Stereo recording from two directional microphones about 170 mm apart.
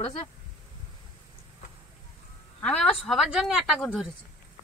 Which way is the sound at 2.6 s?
5° left (ahead or behind).